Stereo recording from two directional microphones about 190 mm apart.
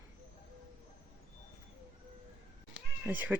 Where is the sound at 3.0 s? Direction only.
10° right (ahead or behind).